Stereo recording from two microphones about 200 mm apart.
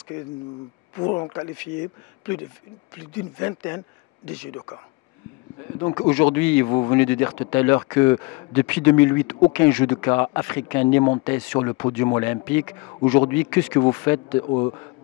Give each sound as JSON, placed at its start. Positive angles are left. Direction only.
{"t": 0.9, "sound": "speech", "side_deg": 25}
{"t": 3.3, "sound": "speech", "side_deg": 15}
{"t": 5.8, "sound": "speech", "side_deg": 25}
{"t": 6.3, "sound": "speech", "side_deg": 10}
{"t": 6.7, "sound": "speech", "side_deg": 20}
{"t": 14.4, "sound": "speech", "side_deg": 25}